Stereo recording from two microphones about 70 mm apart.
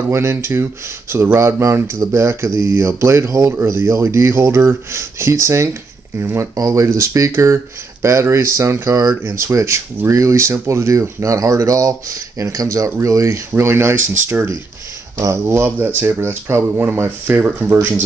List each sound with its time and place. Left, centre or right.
0.1 s speech: right
13.5 s speech: right